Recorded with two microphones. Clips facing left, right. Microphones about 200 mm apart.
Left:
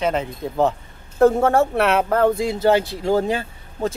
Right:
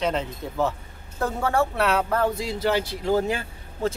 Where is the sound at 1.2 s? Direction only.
50° left (ahead or behind).